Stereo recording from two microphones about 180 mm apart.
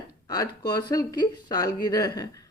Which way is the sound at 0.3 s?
20° left (ahead or behind).